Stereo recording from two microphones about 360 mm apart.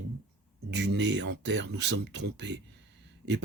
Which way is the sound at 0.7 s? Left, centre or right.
Right.